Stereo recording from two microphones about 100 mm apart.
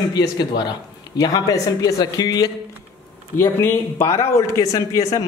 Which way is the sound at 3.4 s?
25° left (ahead or behind).